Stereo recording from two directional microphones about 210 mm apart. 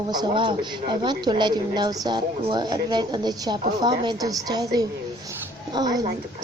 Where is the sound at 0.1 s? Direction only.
20° right (ahead or behind).